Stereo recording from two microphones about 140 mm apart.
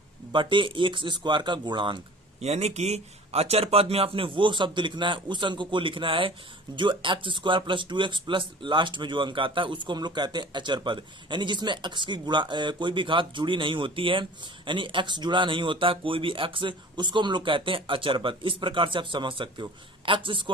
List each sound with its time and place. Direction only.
0.3 s speech: 35° right (ahead or behind)
2.4 s speech: 50° right (ahead or behind)